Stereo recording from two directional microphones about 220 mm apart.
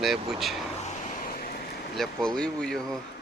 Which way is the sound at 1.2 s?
40° left (ahead or behind).